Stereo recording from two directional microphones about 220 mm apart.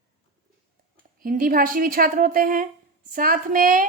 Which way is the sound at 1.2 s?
40° right (ahead or behind).